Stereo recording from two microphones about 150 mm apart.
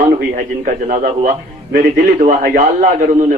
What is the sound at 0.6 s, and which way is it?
A man's voice, 60° right (ahead or behind).